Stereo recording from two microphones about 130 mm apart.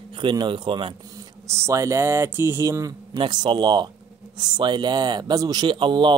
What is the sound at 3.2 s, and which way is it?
Speech, 35° right (ahead or behind).